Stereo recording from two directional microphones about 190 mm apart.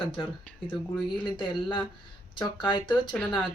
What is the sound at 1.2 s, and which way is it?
Speech, 25° left (ahead or behind).